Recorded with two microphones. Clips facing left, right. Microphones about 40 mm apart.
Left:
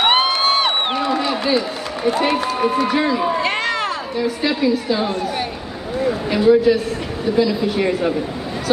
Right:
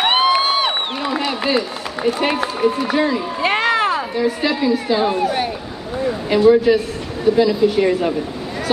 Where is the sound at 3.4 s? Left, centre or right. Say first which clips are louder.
Right 3 dB; centre.